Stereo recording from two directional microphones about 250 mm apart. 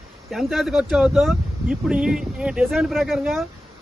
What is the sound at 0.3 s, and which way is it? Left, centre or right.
A man's voice, centre.